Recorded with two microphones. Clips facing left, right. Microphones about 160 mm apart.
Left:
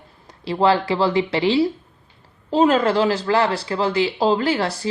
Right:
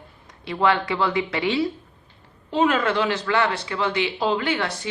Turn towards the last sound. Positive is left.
turn(degrees=35)  # may be behind; listen again after turning